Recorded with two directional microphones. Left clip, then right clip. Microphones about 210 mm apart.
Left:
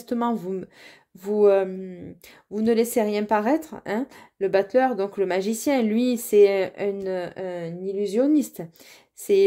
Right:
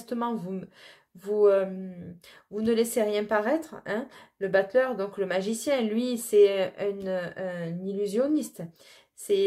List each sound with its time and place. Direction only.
0.0 s speech: 30° left (ahead or behind)